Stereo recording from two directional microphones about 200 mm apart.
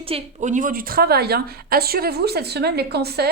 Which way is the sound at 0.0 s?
35° right (ahead or behind).